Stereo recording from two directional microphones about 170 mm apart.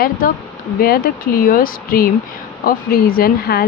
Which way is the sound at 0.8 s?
60° left (ahead or behind).